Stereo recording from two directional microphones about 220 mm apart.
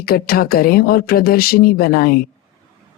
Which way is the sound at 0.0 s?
45° left (ahead or behind).